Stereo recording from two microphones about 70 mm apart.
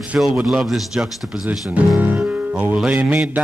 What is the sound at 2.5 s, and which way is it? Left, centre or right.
Speech, right.